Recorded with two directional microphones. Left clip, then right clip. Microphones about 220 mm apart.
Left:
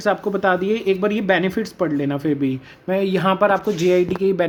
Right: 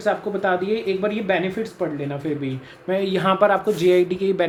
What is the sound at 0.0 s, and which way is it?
Speech, 20° left (ahead or behind).